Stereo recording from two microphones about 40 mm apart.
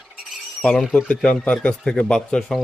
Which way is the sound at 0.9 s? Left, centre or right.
Left.